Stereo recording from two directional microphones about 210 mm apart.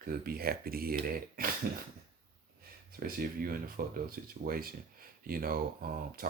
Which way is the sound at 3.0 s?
45° right (ahead or behind).